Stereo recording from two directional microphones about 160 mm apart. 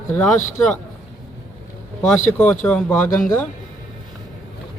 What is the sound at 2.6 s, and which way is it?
Speech, 10° left (ahead or behind).